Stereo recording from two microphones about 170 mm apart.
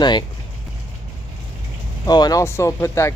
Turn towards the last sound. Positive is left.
turn(degrees=15)  # may be behind; listen again after turning